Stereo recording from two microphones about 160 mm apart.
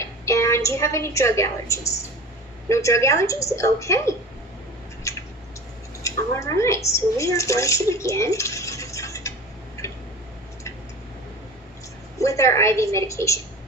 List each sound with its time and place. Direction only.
0.0 s a woman's voice: 20° left (ahead or behind)
5.1 s a sound: 20° left (ahead or behind)
6.0 s a woman's voice: 20° left (ahead or behind)
9.8 s tick-tock: 20° left (ahead or behind)
12.2 s a woman's voice: 20° left (ahead or behind)